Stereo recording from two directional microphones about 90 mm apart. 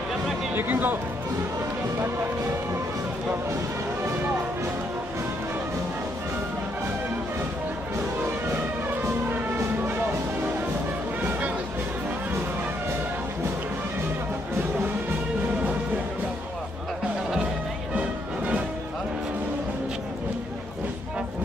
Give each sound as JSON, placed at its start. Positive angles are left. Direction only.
{"t": 0.6, "sound": "speech", "side_deg": -20}